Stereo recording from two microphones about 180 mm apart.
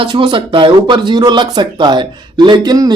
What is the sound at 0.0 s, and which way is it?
Speech, 25° right (ahead or behind).